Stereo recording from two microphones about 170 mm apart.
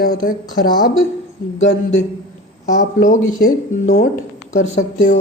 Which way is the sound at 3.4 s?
70° left (ahead or behind).